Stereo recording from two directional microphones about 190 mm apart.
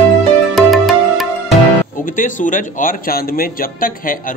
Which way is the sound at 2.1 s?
45° left (ahead or behind).